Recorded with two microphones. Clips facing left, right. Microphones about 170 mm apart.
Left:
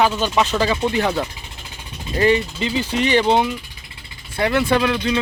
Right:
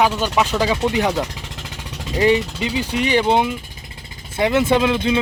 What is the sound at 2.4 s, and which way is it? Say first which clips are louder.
Speech: even; 75° right (ahead or behind).